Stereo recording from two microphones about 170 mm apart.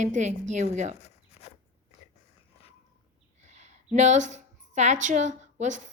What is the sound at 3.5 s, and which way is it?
A woman's voice, 40° right (ahead or behind).